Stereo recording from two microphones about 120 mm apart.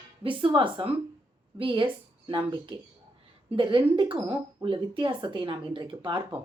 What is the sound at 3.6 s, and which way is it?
Speech, 45° right (ahead or behind).